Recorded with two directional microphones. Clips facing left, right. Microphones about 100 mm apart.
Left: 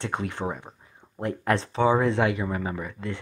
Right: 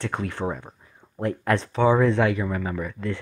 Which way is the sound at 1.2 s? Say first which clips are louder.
Right 2 dB; 25° left (ahead or behind).